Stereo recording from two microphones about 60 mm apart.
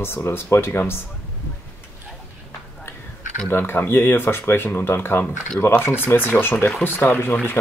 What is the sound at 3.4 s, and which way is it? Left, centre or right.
Speech, left.